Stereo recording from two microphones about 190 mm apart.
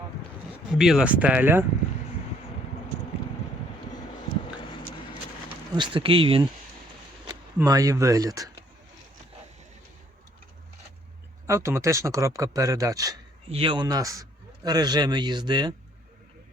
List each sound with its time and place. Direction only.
0.8 s speech: 5° right (ahead or behind)
5.7 s a man's voice: 25° right (ahead or behind)
11.4 s a man's voice: 15° right (ahead or behind)